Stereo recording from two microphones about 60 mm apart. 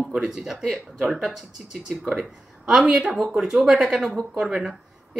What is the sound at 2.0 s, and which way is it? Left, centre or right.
Speech, centre.